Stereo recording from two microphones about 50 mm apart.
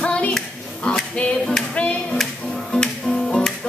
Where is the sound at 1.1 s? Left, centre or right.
Left.